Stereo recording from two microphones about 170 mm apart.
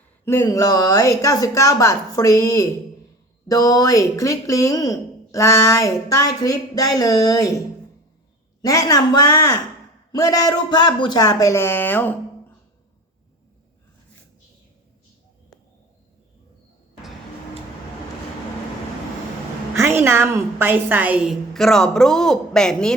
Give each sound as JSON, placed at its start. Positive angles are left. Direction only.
{"t": 0.3, "sound": "speech", "side_deg": 15}
{"t": 8.6, "sound": "speech", "side_deg": 20}
{"t": 19.7, "sound": "a woman's voice", "side_deg": -15}